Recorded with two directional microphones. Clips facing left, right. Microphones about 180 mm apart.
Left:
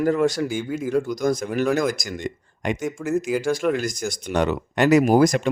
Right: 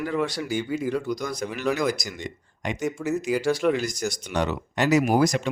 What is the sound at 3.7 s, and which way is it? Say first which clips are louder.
Speech: left 1 dB; 50° left (ahead or behind).